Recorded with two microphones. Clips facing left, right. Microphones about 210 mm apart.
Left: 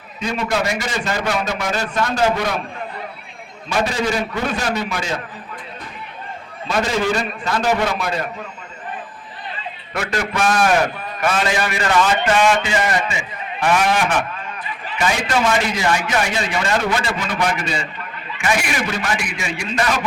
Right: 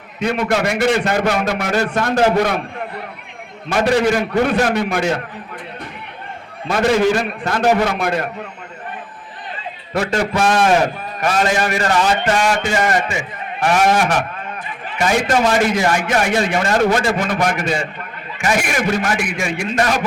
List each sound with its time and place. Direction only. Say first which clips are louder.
0.2 s a man's voice: right 3 dB; 60° right (ahead or behind)
3.7 s a man's voice: right 5 dB; 60° right (ahead or behind)
6.7 s a man's voice: right 5 dB; 60° right (ahead or behind)
9.9 s a man's voice: right 5 dB; 30° right (ahead or behind)
11.2 s a man's voice: right 2 dB; 40° right (ahead or behind)
14.7 s a sound: right 4 dB; 50° right (ahead or behind)
15.4 s a man's voice: right 3 dB; 50° right (ahead or behind)